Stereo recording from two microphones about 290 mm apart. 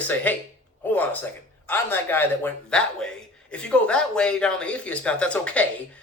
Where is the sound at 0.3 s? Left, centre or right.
Centre.